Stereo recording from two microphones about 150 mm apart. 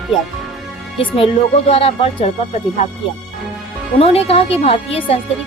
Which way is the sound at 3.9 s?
40° left (ahead or behind).